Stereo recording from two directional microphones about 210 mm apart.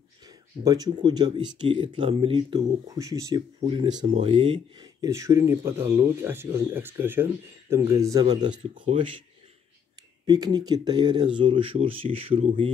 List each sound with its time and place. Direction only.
0.7 s speech: 20° right (ahead or behind)
10.2 s speech: 20° right (ahead or behind)